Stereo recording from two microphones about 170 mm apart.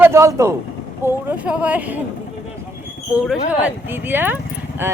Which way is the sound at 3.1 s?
10° right (ahead or behind).